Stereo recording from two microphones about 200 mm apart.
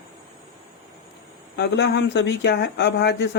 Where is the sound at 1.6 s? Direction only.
60° left (ahead or behind).